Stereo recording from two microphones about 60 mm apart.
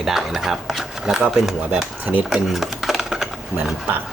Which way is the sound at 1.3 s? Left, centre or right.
Centre.